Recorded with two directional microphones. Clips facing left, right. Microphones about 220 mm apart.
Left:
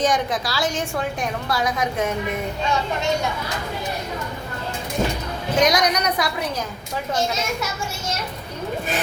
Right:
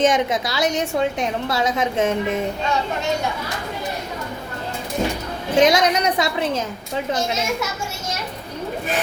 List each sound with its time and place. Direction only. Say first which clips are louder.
0.0 s a woman's voice: right 3 dB; 25° right (ahead or behind)
5.5 s a woman's voice: right 3 dB; 25° right (ahead or behind)